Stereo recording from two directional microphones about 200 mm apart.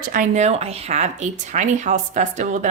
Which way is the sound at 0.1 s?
40° right (ahead or behind).